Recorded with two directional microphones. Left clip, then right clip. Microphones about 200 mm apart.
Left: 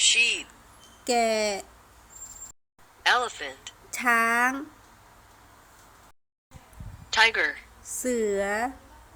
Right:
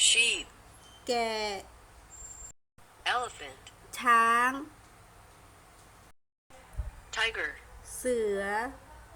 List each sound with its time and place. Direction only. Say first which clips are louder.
0.0 s speech: left 3 dB; 5° left (ahead or behind)
1.0 s speech: left 7 dB; 35° left (ahead or behind)
3.0 s speech: left 8 dB; 25° left (ahead or behind)
7.1 s speech: left 10 dB; 25° left (ahead or behind)